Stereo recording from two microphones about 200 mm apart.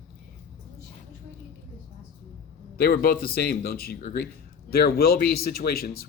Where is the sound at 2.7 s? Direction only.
50° left (ahead or behind).